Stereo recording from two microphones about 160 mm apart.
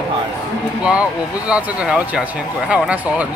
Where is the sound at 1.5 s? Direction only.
10° right (ahead or behind).